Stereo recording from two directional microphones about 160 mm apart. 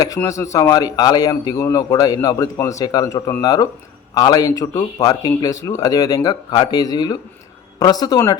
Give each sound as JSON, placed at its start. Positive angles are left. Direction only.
{"t": 0.2, "sound": "a man's voice", "side_deg": 20}